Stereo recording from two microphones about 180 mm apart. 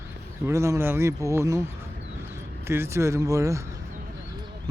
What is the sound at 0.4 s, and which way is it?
Speech, 15° right (ahead or behind).